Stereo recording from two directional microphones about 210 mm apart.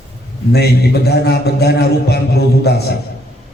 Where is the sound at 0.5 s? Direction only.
50° left (ahead or behind).